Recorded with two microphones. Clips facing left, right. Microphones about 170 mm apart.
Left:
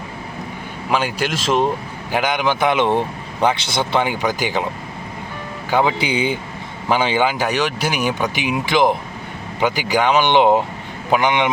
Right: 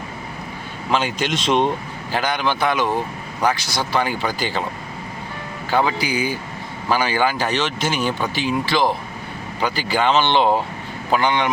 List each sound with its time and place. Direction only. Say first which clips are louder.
0.9 s speech: left 1 dB; 10° left (ahead or behind)
2.1 s speech: left 3 dB; 15° left (ahead or behind)
5.7 s speech: left 2 dB; 20° left (ahead or behind)